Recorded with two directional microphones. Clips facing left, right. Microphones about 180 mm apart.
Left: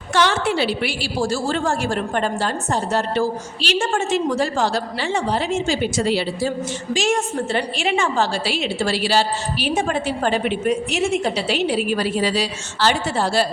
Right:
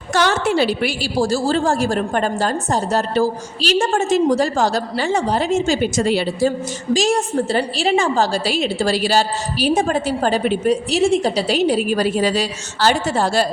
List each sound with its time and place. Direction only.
0.1 s a woman's voice: 45° right (ahead or behind)
6.9 s a woman's voice: 35° right (ahead or behind)